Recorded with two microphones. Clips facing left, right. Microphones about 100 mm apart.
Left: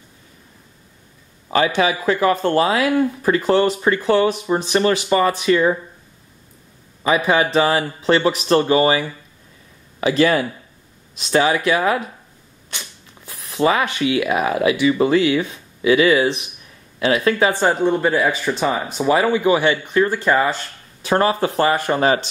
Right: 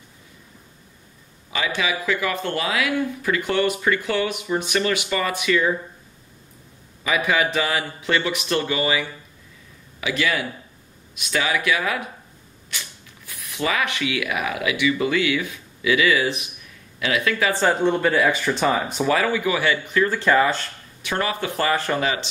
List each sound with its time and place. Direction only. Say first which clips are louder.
1.8 s speech: left 6 dB; 40° left (ahead or behind)
7.0 s speech: left 5 dB; 30° left (ahead or behind)
17.5 s speech: left 2 dB; 20° left (ahead or behind)
17.7 s speech: left 2 dB; 5° left (ahead or behind)
19.0 s speech: left 7 dB; 25° left (ahead or behind)
21.0 s speech: left 8 dB; 35° left (ahead or behind)
21.7 s speech: left 3 dB; 20° left (ahead or behind)
22.0 s speech: left 7 dB; 45° left (ahead or behind)